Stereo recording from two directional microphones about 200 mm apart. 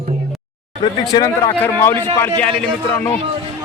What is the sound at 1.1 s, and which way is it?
Speech, 20° left (ahead or behind).